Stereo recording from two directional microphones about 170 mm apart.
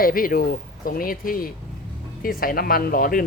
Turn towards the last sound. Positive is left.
turn(degrees=60)  # may be behind; listen again after turning